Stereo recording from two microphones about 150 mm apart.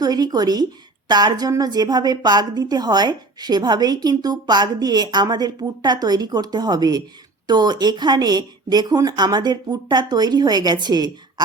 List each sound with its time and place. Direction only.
0.0 s a woman's voice: 25° right (ahead or behind)